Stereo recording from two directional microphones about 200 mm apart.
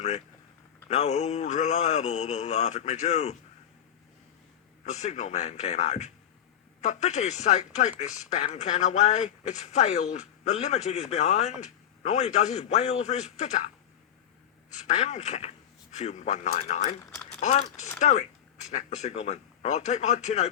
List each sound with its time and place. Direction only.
0.9 s speech: 35° left (ahead or behind)
4.9 s speech: 35° left (ahead or behind)
14.8 s speech: 35° left (ahead or behind)